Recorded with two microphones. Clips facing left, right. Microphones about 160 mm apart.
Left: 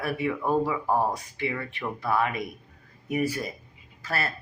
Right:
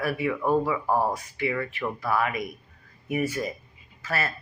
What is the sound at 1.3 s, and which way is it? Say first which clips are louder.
Speech: right 3 dB; 30° left (ahead or behind).